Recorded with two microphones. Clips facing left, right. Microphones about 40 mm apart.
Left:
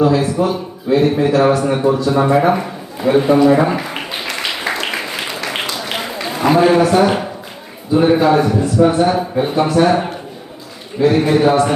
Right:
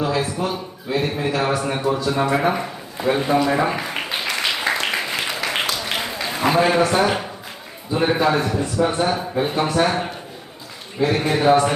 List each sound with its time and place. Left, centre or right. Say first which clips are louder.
0.0 s a man's voice: left 8 dB; centre
2.3 s a sound: left 6 dB; centre
6.1 s a man's voice: left 5 dB; centre